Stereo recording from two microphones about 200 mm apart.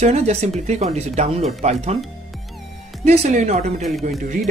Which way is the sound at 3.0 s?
35° right (ahead or behind).